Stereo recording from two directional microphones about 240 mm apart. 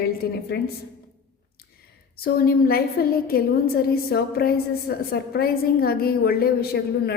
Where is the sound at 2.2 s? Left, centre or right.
Left.